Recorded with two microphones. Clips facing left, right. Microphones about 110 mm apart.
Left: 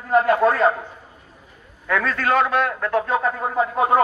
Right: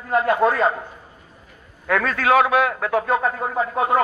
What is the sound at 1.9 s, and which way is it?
Speech, 5° right (ahead or behind).